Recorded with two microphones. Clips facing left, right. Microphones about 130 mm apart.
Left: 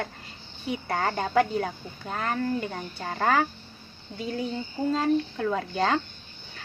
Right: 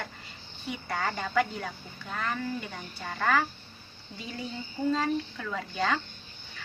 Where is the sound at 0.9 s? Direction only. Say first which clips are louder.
Left 4 dB; 45° left (ahead or behind).